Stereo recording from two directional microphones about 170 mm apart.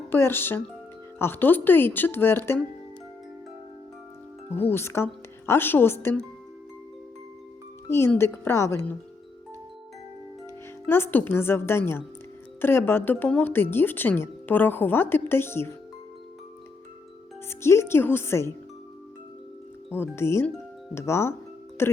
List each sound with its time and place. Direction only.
0.1 s speech: 15° left (ahead or behind)
4.7 s speech: 15° left (ahead or behind)
7.9 s speech: 15° left (ahead or behind)
10.8 s speech: 15° left (ahead or behind)
17.5 s speech: 15° left (ahead or behind)
19.9 s speech: 15° left (ahead or behind)